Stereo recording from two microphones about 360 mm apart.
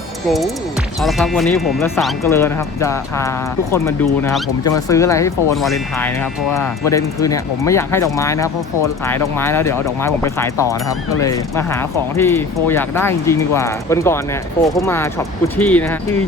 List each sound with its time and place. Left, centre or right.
0.3 s speech: centre